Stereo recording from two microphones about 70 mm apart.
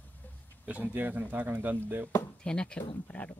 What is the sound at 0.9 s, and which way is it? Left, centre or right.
Speech, right.